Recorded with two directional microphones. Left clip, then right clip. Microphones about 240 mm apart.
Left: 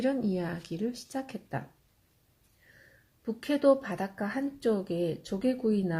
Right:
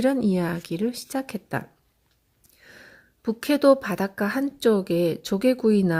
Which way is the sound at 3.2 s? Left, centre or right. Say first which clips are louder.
Right 7 dB; right.